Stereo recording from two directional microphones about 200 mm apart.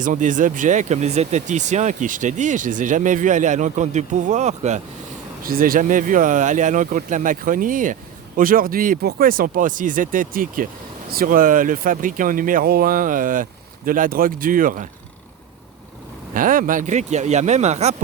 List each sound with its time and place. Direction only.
0.0 s speech: 40° right (ahead or behind)
5.4 s speech: 45° right (ahead or behind)
16.3 s speech: 45° right (ahead or behind)